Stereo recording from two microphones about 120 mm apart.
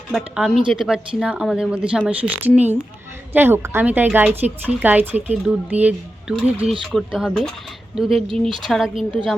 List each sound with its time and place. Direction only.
0.1 s speech: centre (ahead or behind)
8.3 s speech: 45° right (ahead or behind)
8.6 s speech: centre (ahead or behind)